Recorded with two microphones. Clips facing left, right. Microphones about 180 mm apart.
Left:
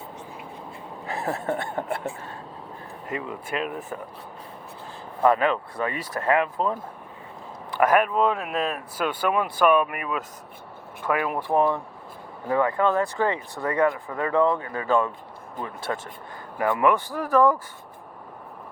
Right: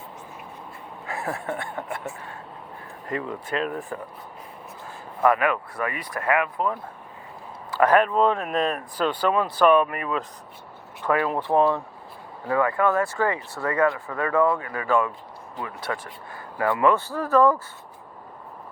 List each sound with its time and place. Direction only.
1.0 s a sound: 35° left (ahead or behind)
1.3 s speech: 25° left (ahead or behind)
3.1 s speech: 10° left (ahead or behind)
5.2 s speech: 25° left (ahead or behind)
7.8 s speech: 10° left (ahead or behind)
12.5 s speech: 20° left (ahead or behind)